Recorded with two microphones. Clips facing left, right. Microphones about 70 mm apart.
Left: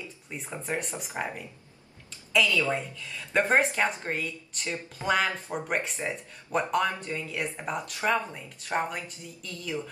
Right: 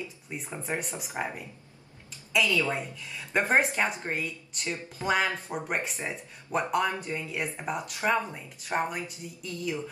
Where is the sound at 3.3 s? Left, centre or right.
Centre.